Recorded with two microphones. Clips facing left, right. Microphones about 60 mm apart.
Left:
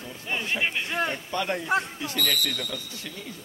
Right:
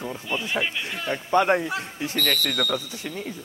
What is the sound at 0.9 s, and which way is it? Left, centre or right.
Speech, left.